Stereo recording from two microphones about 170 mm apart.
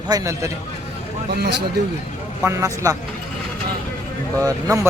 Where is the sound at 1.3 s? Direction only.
70° right (ahead or behind).